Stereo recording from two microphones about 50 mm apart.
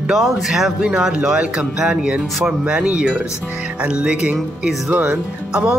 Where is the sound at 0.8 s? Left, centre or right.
Centre.